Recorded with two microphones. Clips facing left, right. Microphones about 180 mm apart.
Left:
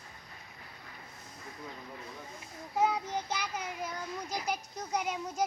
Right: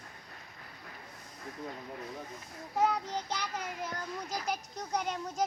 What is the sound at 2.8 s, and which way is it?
A child's voice, 5° left (ahead or behind).